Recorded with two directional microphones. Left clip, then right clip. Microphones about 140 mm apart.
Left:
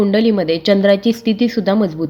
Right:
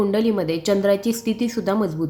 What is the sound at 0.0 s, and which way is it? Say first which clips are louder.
Speech: left 6 dB; 20° left (ahead or behind).